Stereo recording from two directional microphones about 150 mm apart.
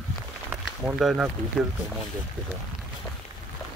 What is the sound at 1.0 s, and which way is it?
Speech, centre (ahead or behind).